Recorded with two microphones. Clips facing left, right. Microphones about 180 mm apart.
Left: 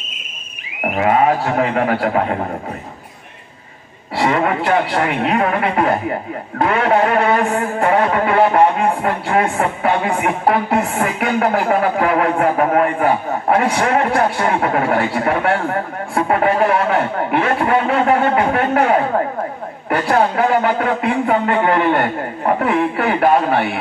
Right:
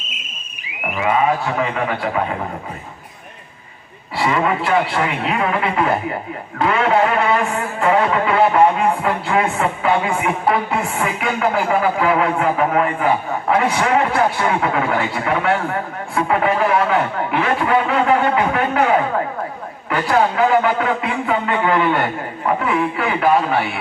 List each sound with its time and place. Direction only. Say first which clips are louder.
0.9 s a woman's voice: left 3 dB; 50° left (ahead or behind)
4.2 s a woman's voice: left 2 dB; 45° left (ahead or behind)